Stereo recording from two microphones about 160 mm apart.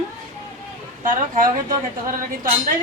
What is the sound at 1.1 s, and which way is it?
Speech, 55° right (ahead or behind).